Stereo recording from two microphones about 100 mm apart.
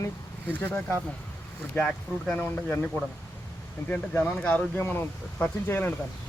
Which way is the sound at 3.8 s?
15° left (ahead or behind).